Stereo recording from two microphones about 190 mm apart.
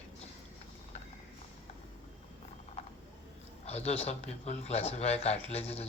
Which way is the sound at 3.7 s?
35° left (ahead or behind).